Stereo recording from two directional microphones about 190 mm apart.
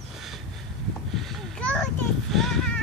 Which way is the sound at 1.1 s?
Centre (ahead or behind).